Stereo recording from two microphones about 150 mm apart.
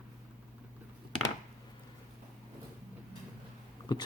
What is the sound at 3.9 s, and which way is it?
Speech, 30° left (ahead or behind).